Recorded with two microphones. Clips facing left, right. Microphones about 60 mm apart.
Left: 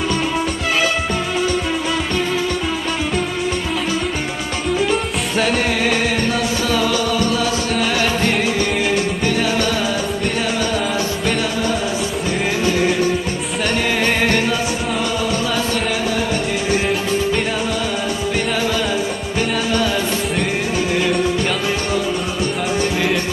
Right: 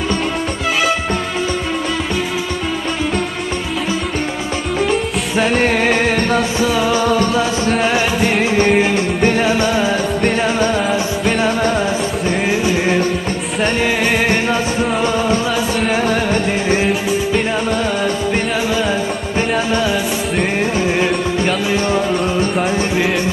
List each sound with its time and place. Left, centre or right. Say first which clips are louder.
5.3 s music: right 2 dB; centre
5.5 s music: right 4 dB; right
6.6 s music: right 3 dB; centre
6.9 s music: right 4 dB; right
13.6 s music: right 3 dB; right
16.0 s music: right 4 dB; right